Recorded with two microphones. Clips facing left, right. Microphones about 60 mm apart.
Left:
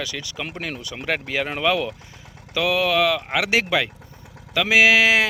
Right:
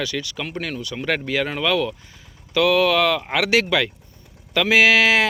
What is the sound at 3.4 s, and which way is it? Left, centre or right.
Speech, centre.